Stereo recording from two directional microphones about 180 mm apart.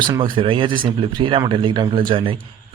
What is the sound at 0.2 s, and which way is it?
A man's voice, 30° right (ahead or behind).